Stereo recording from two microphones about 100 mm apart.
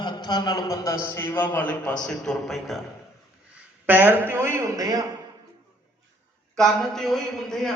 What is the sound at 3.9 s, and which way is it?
A man's voice, 20° right (ahead or behind).